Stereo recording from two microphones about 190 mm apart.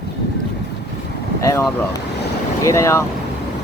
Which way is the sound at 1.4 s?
15° left (ahead or behind).